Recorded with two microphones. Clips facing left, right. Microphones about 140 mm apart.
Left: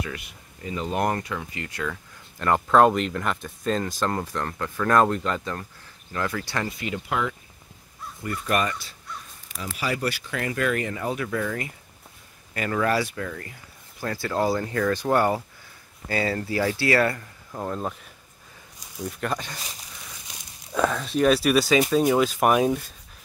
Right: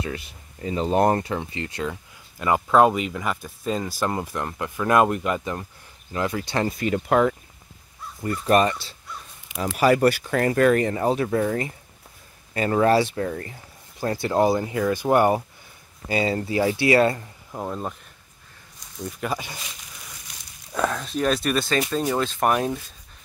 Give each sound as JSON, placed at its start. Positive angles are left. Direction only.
{"t": 0.0, "sound": "speech", "side_deg": -30}
{"t": 2.3, "sound": "speech", "side_deg": -5}
{"t": 6.8, "sound": "speech", "side_deg": -45}
{"t": 8.2, "sound": "speech", "side_deg": -30}
{"t": 9.8, "sound": "speech", "side_deg": -50}
{"t": 17.6, "sound": "speech", "side_deg": -5}
{"t": 19.0, "sound": "speech", "side_deg": -5}
{"t": 20.7, "sound": "speech", "side_deg": 0}